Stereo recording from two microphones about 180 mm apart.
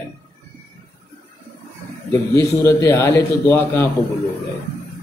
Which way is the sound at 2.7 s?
10° left (ahead or behind).